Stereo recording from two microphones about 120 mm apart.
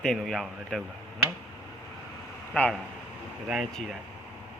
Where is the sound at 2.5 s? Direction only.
Centre (ahead or behind).